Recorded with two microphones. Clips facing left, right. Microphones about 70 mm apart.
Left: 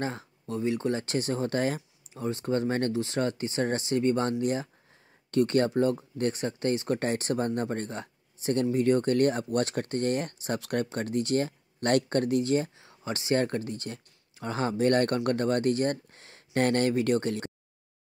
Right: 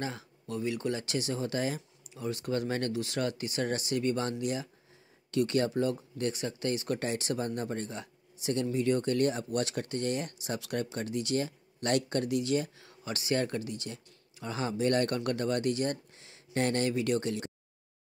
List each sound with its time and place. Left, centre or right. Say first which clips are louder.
0.0 s speech: left 4 dB; left
2.2 s speech: left 4 dB; left